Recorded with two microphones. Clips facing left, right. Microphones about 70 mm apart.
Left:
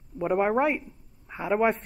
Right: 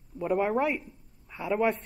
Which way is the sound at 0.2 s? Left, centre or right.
Left.